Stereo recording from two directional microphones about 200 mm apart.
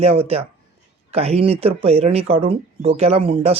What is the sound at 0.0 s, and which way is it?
Speech, 30° right (ahead or behind).